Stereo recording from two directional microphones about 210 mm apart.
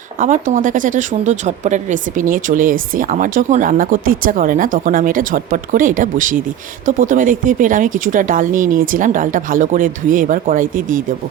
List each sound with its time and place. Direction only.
0.2 s speech: 40° right (ahead or behind)